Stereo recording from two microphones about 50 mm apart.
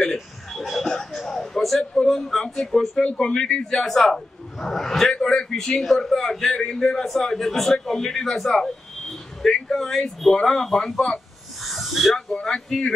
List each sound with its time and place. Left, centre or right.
0.0 s a sound: centre
2.0 s a man's voice: centre
3.0 s a man's voice: centre
3.8 s a man's voice: centre
5.1 s a man's voice: centre
11.6 s a sound: centre
12.4 s a man's voice: centre